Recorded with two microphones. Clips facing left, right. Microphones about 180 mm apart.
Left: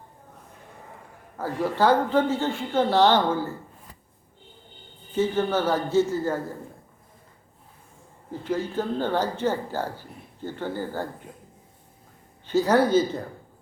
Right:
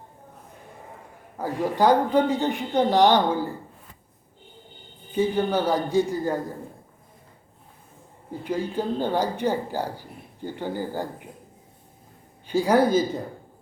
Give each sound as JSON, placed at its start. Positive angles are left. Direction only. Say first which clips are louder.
{"t": 1.4, "sound": "speech", "louder": "right 1 dB", "side_deg": -15}
{"t": 5.1, "sound": "speech", "louder": "right 1 dB", "side_deg": -15}
{"t": 8.3, "sound": "speech", "louder": "even", "side_deg": -15}
{"t": 12.5, "sound": "speech", "louder": "even", "side_deg": -10}